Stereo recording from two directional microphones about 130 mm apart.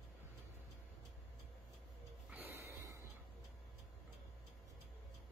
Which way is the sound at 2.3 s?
20° right (ahead or behind).